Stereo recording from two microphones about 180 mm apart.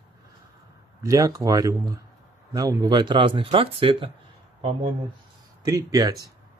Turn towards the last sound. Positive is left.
turn(degrees=-20)  # may be behind; listen again after turning